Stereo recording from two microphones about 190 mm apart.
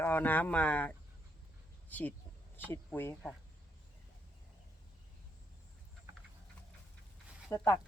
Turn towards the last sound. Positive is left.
turn(degrees=15)  # may be behind; listen again after turning